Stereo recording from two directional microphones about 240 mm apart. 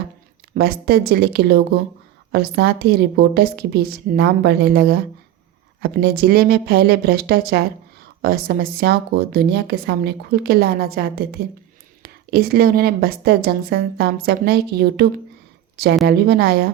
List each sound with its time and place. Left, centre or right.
0.5 s speech: right